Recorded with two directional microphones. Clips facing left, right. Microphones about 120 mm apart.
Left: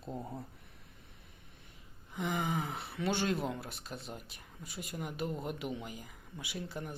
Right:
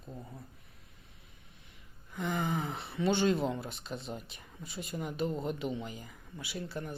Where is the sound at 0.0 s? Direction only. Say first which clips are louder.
Left 5 dB; 65° left (ahead or behind).